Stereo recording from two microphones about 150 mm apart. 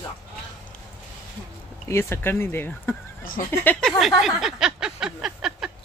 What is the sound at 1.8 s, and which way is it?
Speech, 15° left (ahead or behind).